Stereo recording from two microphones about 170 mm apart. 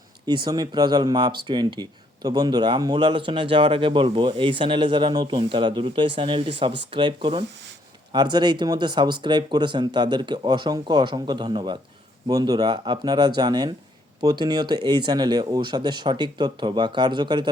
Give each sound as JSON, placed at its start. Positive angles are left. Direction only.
{"t": 0.4, "sound": "speech", "side_deg": -25}